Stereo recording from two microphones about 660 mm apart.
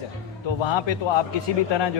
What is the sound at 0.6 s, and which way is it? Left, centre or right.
A man's voice, left.